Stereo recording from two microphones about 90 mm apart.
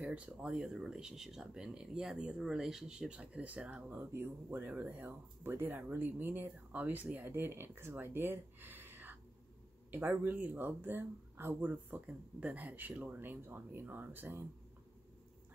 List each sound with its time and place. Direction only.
0.0 s speech: 10° right (ahead or behind)
4.0 s speech: 25° right (ahead or behind)